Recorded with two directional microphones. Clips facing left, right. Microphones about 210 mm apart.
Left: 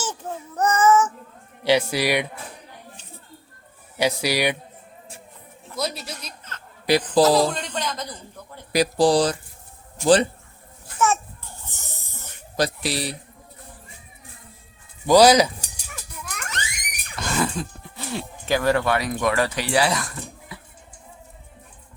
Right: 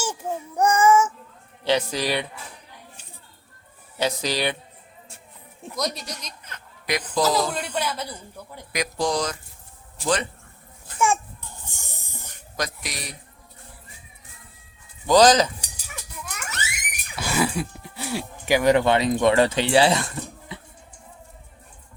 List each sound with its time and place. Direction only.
0.0 s child singing: 10° right (ahead or behind)
1.6 s speech: 10° left (ahead or behind)
3.9 s speech: 10° left (ahead or behind)
5.7 s a woman's voice: 5° left (ahead or behind)
6.8 s speech: 35° left (ahead or behind)
7.5 s a man's voice: 10° right (ahead or behind)
8.7 s speech: 35° left (ahead or behind)
10.9 s a sound: 10° right (ahead or behind)
12.5 s speech: 30° left (ahead or behind)
15.0 s speech: 10° left (ahead or behind)
15.9 s a sound: centre (ahead or behind); by 20.6 s 25° right (ahead or behind)